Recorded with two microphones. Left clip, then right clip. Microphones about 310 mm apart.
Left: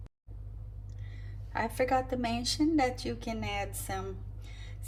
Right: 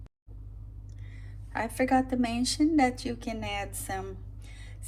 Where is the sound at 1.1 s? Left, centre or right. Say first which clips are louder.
Right 1 dB; right.